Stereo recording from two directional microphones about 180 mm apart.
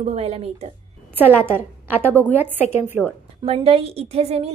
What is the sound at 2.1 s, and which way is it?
A woman's voice, 10° left (ahead or behind).